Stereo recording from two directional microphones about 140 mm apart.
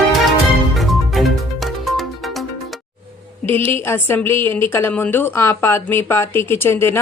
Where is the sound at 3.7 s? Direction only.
15° left (ahead or behind).